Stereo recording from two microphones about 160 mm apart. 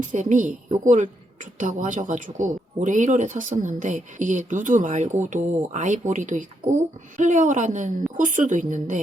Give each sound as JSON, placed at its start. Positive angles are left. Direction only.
{"t": 0.0, "sound": "speech", "side_deg": -50}